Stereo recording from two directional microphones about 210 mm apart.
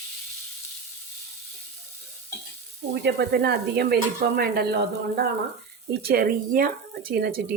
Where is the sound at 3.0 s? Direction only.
50° right (ahead or behind).